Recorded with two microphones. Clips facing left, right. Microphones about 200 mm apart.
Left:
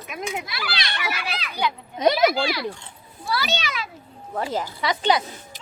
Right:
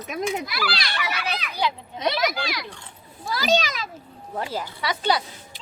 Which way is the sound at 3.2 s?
40° right (ahead or behind).